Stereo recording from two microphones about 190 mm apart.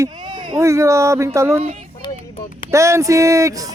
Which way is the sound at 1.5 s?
35° right (ahead or behind).